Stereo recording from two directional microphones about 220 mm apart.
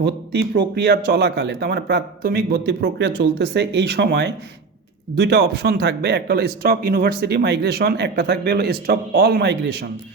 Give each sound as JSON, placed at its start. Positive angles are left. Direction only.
{"t": 0.0, "sound": "speech", "side_deg": -50}